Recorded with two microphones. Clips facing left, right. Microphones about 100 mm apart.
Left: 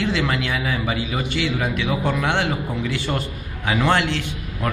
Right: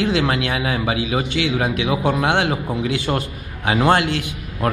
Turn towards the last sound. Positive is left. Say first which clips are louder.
# right 3 dB
turn(degrees=-45)  # may be behind; listen again after turning